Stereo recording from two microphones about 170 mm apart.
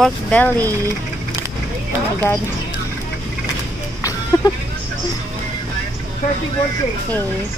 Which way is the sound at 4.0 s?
20° left (ahead or behind).